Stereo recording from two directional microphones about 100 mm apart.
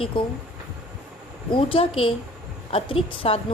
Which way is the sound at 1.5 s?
65° left (ahead or behind).